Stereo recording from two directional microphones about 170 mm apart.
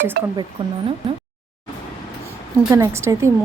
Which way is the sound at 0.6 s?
35° right (ahead or behind).